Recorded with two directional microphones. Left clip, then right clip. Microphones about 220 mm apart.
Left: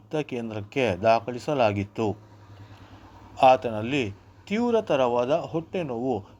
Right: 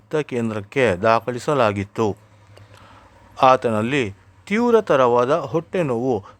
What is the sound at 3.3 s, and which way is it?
A man's voice, 30° right (ahead or behind).